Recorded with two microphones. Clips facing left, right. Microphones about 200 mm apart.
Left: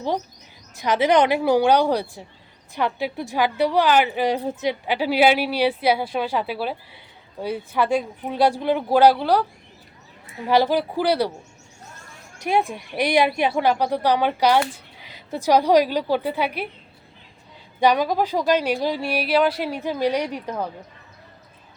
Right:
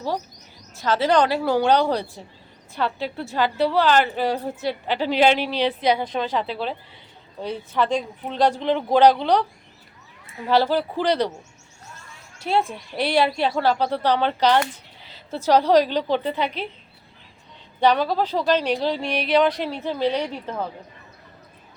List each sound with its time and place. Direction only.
0.8 s a woman's voice: 15° left (ahead or behind)
12.4 s a woman's voice: 15° left (ahead or behind)
17.7 s a woman's voice: 10° left (ahead or behind)